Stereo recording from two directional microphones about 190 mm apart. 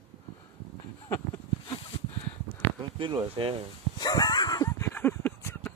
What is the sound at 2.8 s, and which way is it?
Speech, 25° right (ahead or behind).